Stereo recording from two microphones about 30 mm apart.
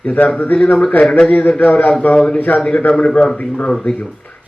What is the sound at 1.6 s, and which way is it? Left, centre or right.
Speech, left.